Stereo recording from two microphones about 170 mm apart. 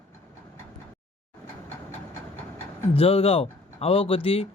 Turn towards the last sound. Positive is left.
turn(degrees=35)  # may be behind; listen again after turning